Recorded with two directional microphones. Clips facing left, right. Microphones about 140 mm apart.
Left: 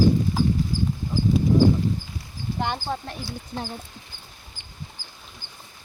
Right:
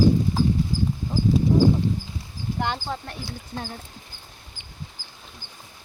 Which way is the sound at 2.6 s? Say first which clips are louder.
Left 1 dB; 15° left (ahead or behind).